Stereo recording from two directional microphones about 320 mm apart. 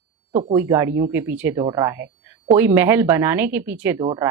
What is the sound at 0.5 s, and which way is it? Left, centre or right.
Speech, centre.